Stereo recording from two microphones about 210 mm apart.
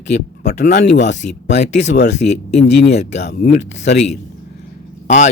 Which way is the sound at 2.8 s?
50° left (ahead or behind).